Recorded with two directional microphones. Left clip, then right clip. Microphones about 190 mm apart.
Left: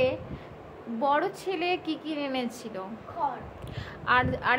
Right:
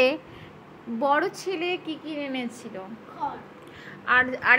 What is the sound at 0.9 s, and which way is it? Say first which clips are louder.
Speech: right 3 dB; 10° right (ahead or behind).